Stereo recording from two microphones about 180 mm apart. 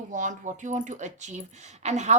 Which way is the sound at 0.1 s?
45° right (ahead or behind).